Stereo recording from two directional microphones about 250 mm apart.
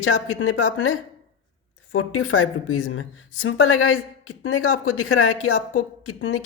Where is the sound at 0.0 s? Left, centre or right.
Left.